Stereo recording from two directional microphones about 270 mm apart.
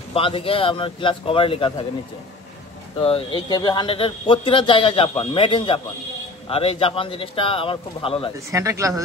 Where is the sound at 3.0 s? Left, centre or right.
Centre.